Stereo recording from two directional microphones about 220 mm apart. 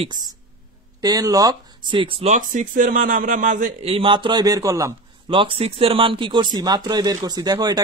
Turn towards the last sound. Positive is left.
turn(degrees=-15)  # may be behind; listen again after turning